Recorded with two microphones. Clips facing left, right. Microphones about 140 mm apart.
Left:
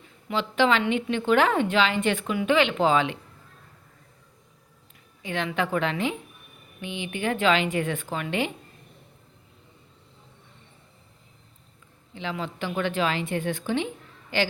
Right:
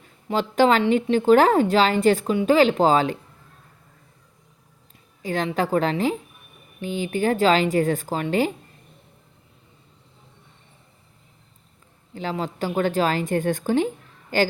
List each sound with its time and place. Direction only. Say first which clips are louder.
0.3 s a woman's voice: right 4 dB; 40° right (ahead or behind)
5.2 s a woman's voice: right 4 dB; 40° right (ahead or behind)
12.1 s a woman's voice: right 4 dB; 40° right (ahead or behind)